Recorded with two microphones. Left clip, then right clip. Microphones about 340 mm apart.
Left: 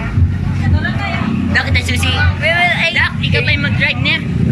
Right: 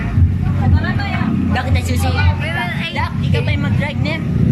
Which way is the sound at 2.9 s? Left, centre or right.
Centre.